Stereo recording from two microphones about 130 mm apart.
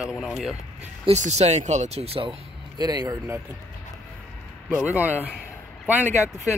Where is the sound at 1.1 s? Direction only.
60° right (ahead or behind).